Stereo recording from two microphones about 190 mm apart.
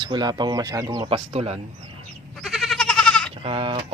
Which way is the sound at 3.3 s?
30° right (ahead or behind).